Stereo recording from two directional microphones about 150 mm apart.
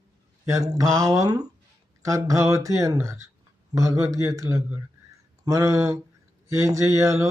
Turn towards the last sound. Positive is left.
turn(degrees=-20)  # may be behind; listen again after turning